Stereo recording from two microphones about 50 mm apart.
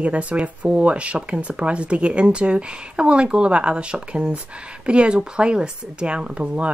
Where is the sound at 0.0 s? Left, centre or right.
Right.